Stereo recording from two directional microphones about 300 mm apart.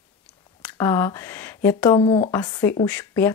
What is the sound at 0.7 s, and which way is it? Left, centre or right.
Speech, centre.